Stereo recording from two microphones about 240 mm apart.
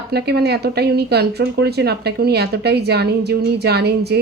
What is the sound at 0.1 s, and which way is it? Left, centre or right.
Speech, right.